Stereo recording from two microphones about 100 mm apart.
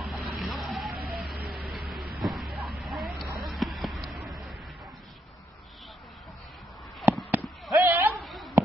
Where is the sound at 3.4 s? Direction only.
Centre (ahead or behind).